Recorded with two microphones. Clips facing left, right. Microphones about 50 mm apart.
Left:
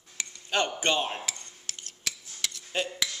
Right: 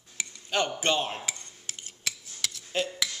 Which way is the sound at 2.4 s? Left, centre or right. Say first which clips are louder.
Right 1 dB; centre.